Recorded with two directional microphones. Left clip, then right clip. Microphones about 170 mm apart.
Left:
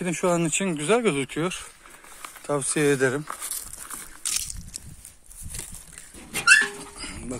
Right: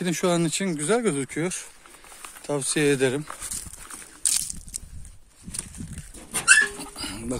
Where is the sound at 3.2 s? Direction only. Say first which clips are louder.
Left 2 dB; 45° left (ahead or behind).